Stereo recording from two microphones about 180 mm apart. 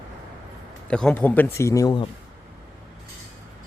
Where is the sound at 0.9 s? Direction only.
5° left (ahead or behind); by 2.1 s 20° left (ahead or behind).